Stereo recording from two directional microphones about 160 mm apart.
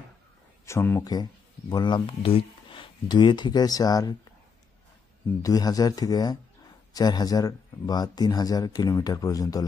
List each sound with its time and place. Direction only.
0.7 s speech: 15° left (ahead or behind)
1.7 s speech: 25° left (ahead or behind)
5.4 s speech: 20° left (ahead or behind)